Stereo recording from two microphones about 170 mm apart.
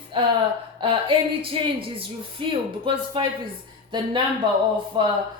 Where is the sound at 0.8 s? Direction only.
30° right (ahead or behind).